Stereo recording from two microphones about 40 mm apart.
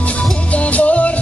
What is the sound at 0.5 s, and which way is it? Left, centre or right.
Music, left.